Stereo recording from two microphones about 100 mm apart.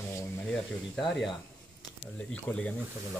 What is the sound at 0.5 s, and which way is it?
Speech, 5° left (ahead or behind).